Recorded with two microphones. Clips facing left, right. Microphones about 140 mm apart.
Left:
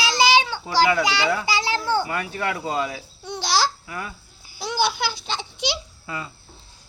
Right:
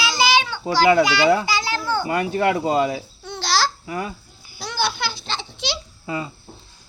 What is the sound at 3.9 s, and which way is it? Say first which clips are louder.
Speech: right 6 dB; 25° right (ahead or behind).